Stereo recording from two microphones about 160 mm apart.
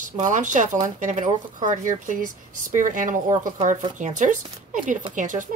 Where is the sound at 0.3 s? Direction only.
50° right (ahead or behind).